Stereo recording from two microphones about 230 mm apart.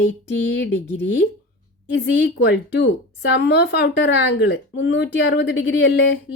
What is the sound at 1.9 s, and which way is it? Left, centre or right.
A woman's voice, left.